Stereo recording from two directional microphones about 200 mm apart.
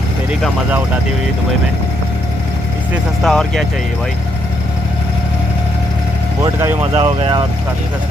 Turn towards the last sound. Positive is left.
turn(degrees=-25)  # may be behind; listen again after turning